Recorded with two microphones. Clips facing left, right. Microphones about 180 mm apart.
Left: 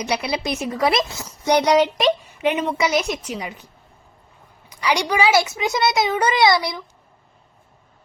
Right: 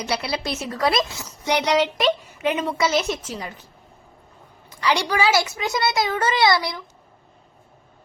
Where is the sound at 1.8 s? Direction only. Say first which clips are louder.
Left 3 dB; 15° left (ahead or behind).